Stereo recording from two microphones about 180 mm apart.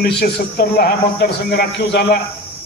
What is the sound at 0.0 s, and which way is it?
A man's voice, 60° left (ahead or behind).